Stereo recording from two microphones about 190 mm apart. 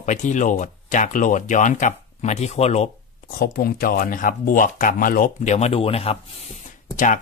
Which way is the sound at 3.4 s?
50° left (ahead or behind).